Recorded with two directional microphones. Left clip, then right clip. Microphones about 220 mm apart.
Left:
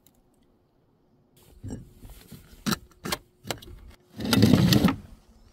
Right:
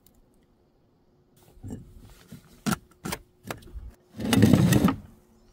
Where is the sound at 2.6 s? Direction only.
15° right (ahead or behind).